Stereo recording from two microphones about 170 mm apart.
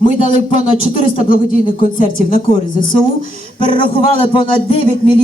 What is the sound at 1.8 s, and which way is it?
Speech, 50° left (ahead or behind).